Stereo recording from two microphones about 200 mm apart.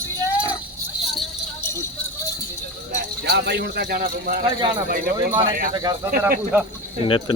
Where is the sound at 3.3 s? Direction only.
60° right (ahead or behind).